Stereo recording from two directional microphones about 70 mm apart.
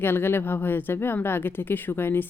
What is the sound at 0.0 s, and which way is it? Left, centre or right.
Speech, left.